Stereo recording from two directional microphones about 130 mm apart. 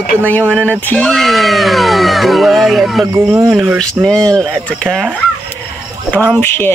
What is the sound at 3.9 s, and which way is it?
Speech, 5° left (ahead or behind).